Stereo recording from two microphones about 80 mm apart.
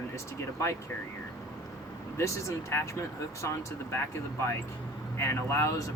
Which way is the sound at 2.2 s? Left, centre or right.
Left.